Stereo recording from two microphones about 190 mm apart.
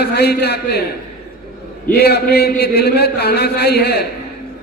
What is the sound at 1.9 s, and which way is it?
A man's voice, 55° left (ahead or behind).